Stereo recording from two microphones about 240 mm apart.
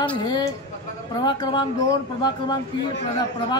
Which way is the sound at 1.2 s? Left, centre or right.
Centre.